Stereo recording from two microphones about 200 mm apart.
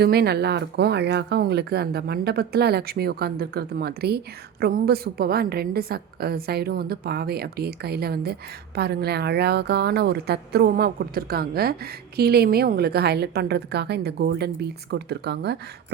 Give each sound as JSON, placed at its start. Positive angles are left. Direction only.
{"t": 0.0, "sound": "a woman's voice", "side_deg": -50}